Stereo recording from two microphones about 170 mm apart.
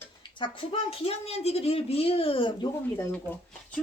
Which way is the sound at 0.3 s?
30° left (ahead or behind).